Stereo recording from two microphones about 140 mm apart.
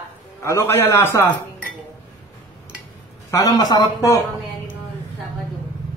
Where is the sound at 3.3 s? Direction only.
25° left (ahead or behind).